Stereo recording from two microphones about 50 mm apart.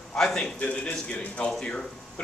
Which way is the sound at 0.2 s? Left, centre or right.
Centre.